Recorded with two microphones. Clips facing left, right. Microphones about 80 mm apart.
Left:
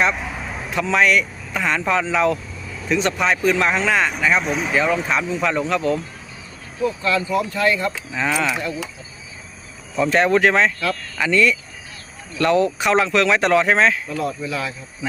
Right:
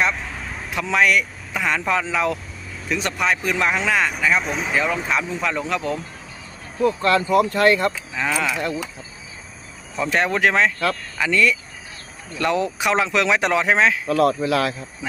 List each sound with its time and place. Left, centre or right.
0.0 s vehicle: centre
0.7 s speech: centre
6.8 s speech: right
7.9 s speech: centre
9.9 s speech: centre
14.1 s speech: right